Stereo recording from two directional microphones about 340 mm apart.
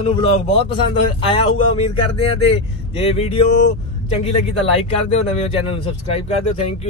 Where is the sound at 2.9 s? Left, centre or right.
Centre.